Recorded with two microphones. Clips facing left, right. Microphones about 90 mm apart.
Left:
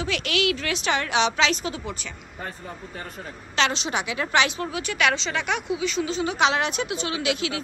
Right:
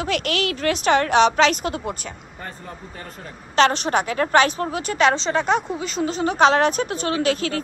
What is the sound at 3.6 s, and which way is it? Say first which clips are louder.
A woman's voice: right 7 dB; 50° right (ahead or behind).